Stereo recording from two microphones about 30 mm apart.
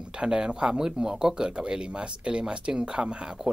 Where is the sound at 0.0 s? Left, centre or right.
Right.